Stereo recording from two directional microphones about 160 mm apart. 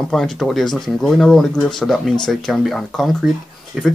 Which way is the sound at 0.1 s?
Centre (ahead or behind).